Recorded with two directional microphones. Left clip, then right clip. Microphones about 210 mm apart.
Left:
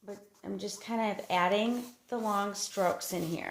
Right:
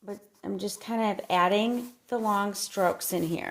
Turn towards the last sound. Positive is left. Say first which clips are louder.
# right 5 dB
turn(degrees=-55)  # may be behind; listen again after turning